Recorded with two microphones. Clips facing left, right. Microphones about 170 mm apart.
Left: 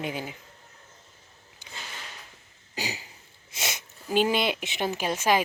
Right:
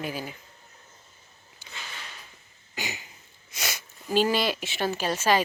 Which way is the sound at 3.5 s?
25° left (ahead or behind).